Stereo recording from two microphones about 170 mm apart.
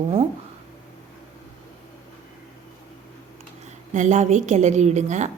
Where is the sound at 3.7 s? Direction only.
45° right (ahead or behind).